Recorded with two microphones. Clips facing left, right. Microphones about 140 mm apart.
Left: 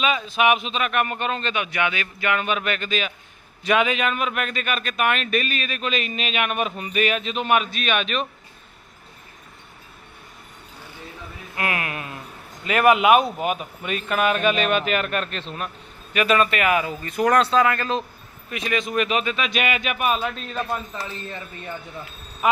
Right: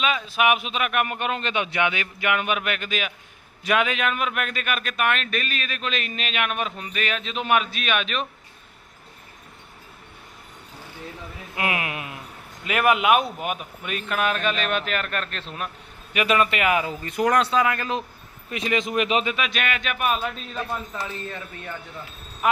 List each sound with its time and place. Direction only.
0.0 s speech: centre (ahead or behind)
1.5 s a man's voice: 25° right (ahead or behind); by 8.3 s centre (ahead or behind)
11.5 s a sound: 15° right (ahead or behind)
12.6 s a man's voice: centre (ahead or behind)
16.1 s speech: 15° right (ahead or behind)
18.5 s speech: 25° right (ahead or behind)
19.4 s a man's voice: centre (ahead or behind)